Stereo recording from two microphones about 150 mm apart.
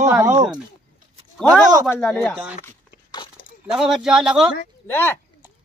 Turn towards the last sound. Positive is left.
turn(degrees=15)  # may be behind; listen again after turning